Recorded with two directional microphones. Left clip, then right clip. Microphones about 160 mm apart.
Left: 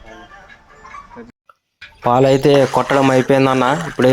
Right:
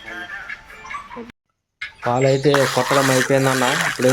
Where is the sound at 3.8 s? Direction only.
20° left (ahead or behind).